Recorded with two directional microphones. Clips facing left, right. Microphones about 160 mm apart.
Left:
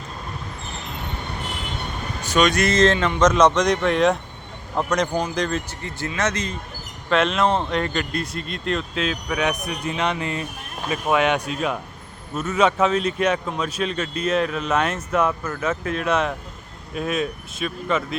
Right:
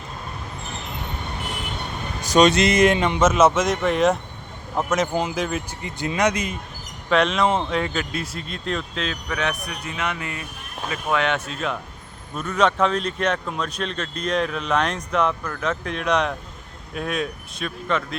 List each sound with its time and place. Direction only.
2.3 s speech: 30° right (ahead or behind)
2.6 s speech: 15° right (ahead or behind)
7.1 s speech: centre (ahead or behind); by 10.4 s 30° left (ahead or behind)
11.1 s speech: 15° left (ahead or behind)